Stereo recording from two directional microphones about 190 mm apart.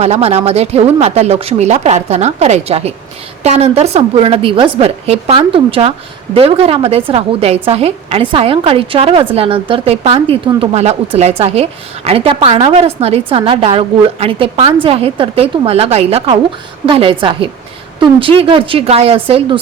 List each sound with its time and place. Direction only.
0.0 s a woman's voice: 35° right (ahead or behind)